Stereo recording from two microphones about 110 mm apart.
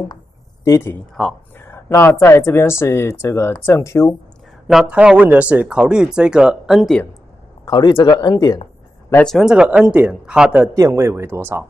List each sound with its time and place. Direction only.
0.7 s speech: 30° left (ahead or behind)
1.2 s speech: centre (ahead or behind)
1.6 s speech: 25° left (ahead or behind)
4.6 s speech: 5° right (ahead or behind)
7.6 s speech: 40° left (ahead or behind)
9.4 s speech: 5° right (ahead or behind)
10.8 s speech: 25° right (ahead or behind)